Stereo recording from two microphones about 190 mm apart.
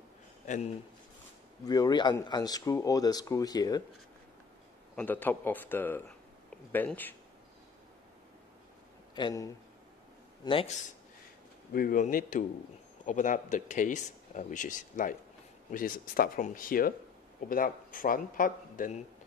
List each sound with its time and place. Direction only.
1.6 s speech: 20° left (ahead or behind)
4.9 s speech: 10° left (ahead or behind)
9.1 s speech: 20° left (ahead or behind)
11.7 s speech: 45° left (ahead or behind)